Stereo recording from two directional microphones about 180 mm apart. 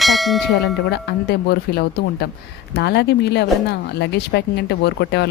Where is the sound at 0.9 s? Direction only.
65° left (ahead or behind).